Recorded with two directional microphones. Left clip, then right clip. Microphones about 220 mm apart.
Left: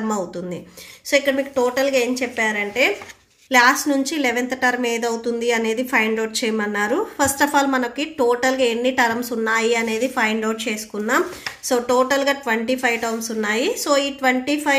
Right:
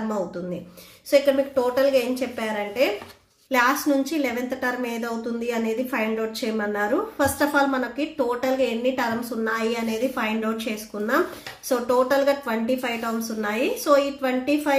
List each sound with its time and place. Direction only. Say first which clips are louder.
1.1 s a woman's voice: even; 30° left (ahead or behind)